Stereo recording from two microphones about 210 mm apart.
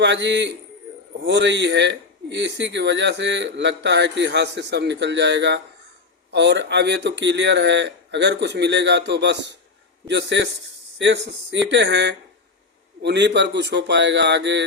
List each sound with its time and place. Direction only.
0.0 s a man's voice: 55° right (ahead or behind)